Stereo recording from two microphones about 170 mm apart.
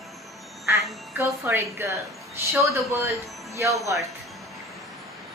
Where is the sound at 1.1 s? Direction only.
15° right (ahead or behind).